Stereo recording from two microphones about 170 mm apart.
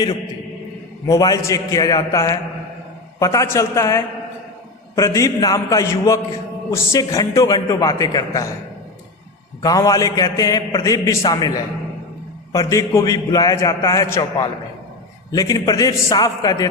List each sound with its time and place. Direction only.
1.0 s a man's voice: 20° left (ahead or behind)
9.6 s a man's voice: 20° left (ahead or behind)